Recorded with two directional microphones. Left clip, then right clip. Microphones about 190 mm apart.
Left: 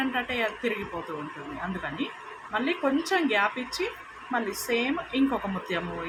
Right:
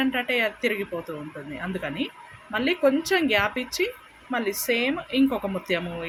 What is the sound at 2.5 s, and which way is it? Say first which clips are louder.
A woman's voice: right 5 dB; 50° right (ahead or behind).